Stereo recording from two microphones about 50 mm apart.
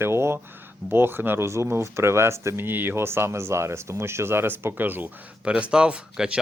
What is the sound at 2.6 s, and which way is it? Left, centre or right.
Speech, right.